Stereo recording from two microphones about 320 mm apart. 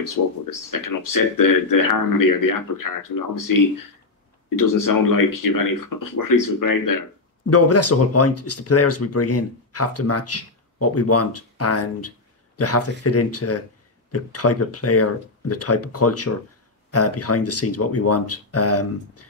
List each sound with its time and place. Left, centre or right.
0.2 s speech: left
0.7 s speech: left
4.6 s speech: left
7.4 s speech: left